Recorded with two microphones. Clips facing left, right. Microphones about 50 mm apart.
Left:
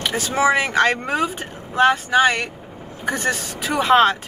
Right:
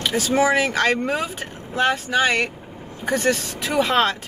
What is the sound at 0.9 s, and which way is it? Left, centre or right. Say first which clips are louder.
Speech: left 1 dB; centre.